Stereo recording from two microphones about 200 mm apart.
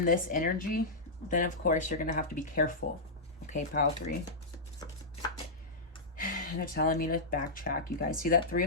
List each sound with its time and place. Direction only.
0.0 s speech: 45° left (ahead or behind)
6.1 s speech: 45° left (ahead or behind)